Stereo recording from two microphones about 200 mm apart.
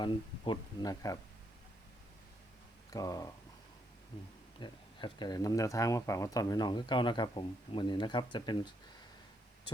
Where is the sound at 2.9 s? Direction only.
15° left (ahead or behind).